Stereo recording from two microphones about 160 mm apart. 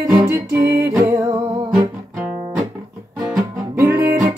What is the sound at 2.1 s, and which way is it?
Guitar, 15° right (ahead or behind).